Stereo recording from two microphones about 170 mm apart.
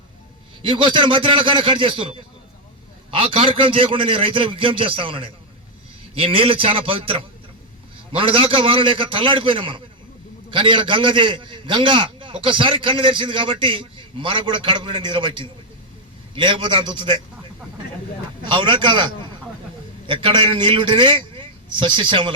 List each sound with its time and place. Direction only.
0.6 s a man's voice: 30° right (ahead or behind)
18.5 s a man's voice: 30° right (ahead or behind)
20.1 s a man's voice: 30° right (ahead or behind)